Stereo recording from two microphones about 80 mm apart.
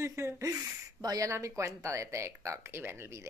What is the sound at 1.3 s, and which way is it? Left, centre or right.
Speech, right.